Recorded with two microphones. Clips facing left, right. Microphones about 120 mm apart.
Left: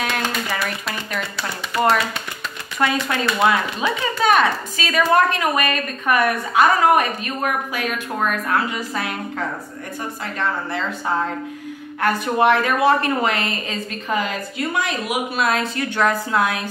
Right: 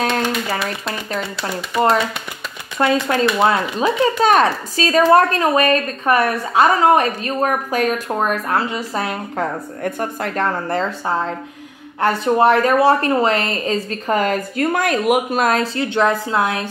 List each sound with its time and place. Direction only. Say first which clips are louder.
0.0 s speech: right 4 dB; 25° right (ahead or behind)
2.8 s speech: right 5 dB; 30° right (ahead or behind)
9.8 s speech: right 7 dB; 55° right (ahead or behind)
12.0 s speech: right 3 dB; 30° right (ahead or behind)